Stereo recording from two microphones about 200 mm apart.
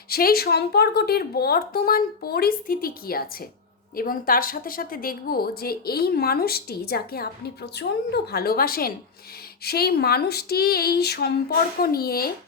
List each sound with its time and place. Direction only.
0.1 s a woman's voice: 50° left (ahead or behind)